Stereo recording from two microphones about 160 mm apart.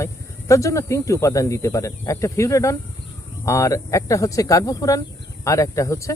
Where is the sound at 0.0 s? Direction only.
20° left (ahead or behind).